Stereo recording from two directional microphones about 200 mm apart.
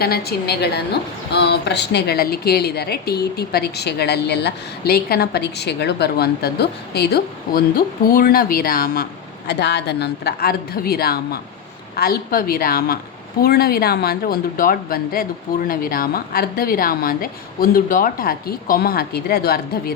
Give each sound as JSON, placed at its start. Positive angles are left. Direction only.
{"t": 0.0, "sound": "a woman's voice", "side_deg": 50}
{"t": 9.5, "sound": "a woman's voice", "side_deg": 60}